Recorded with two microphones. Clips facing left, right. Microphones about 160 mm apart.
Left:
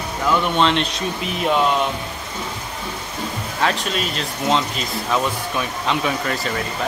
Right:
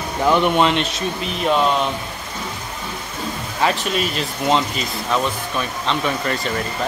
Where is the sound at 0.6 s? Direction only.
5° right (ahead or behind).